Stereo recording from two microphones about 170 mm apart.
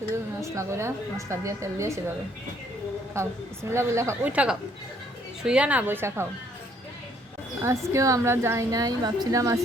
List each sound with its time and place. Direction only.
0.4 s a woman's voice: 15° right (ahead or behind)
3.2 s a woman's voice: 15° right (ahead or behind)
7.6 s a woman's voice: 15° right (ahead or behind)